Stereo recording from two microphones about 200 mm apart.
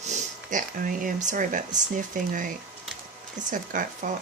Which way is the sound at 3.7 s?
40° right (ahead or behind).